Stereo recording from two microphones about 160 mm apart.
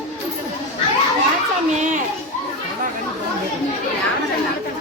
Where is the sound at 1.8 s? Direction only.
50° right (ahead or behind).